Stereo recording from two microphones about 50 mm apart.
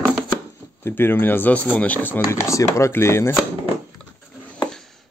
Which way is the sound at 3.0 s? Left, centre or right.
Left.